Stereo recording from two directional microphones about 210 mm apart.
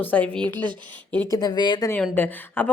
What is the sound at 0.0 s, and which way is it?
A woman's voice, 5° left (ahead or behind).